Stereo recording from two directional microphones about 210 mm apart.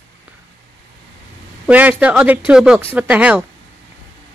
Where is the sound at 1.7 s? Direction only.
5° right (ahead or behind).